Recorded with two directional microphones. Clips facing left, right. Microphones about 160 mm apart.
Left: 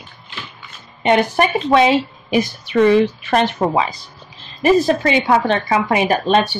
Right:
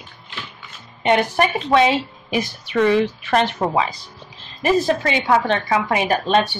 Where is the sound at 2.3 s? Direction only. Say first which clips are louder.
Left 4 dB; centre (ahead or behind).